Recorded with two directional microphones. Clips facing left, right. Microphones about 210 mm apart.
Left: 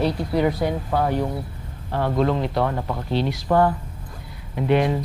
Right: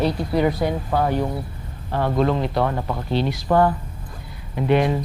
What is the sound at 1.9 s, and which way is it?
Speech, 25° right (ahead or behind).